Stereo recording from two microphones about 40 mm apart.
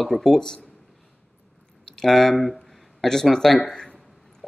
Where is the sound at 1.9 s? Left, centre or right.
Centre.